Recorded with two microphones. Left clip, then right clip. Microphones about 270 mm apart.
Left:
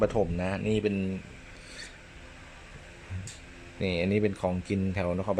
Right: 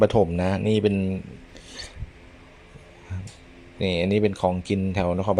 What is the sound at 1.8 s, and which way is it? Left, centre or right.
Filing, centre.